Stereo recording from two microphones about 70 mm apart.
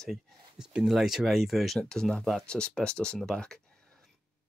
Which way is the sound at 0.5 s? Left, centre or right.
Centre.